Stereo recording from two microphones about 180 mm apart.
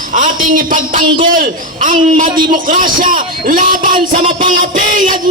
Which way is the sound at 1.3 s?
50° right (ahead or behind).